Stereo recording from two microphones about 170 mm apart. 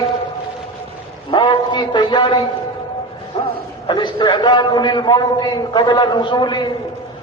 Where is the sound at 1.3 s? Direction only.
25° left (ahead or behind).